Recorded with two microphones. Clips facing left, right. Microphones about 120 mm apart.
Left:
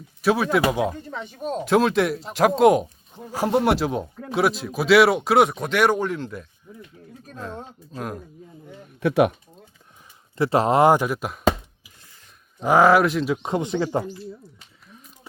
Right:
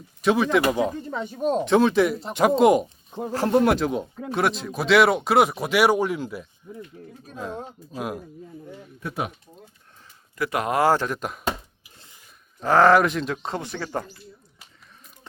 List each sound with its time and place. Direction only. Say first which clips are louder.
0.2 s speech: even; 5° left (ahead or behind)
1.4 s speech: right 5 dB; 40° right (ahead or behind)
1.6 s speech: left 1 dB; centre (ahead or behind)
3.3 s speech: right 1 dB; 10° left (ahead or behind); by 8.2 s 10° right (ahead or behind)
9.0 s speech: left 12 dB; 80° left
10.3 s speech: left 5 dB; 30° left (ahead or behind); by 11.3 s 5° left (ahead or behind)
12.5 s speech: left 1 dB; 15° left (ahead or behind)